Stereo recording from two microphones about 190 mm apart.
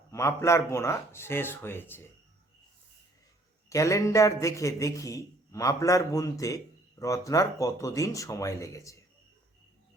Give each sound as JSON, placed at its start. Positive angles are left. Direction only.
{"t": 0.1, "sound": "a man's voice", "side_deg": 15}
{"t": 3.7, "sound": "a man's voice", "side_deg": 15}